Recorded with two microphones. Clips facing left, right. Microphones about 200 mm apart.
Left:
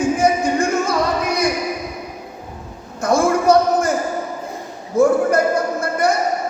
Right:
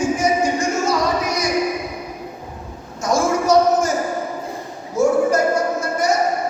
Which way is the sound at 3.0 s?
55° left (ahead or behind).